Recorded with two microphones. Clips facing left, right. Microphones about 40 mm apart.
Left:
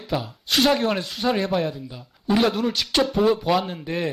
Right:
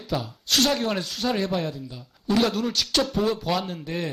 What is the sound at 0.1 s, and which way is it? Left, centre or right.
Speech, centre.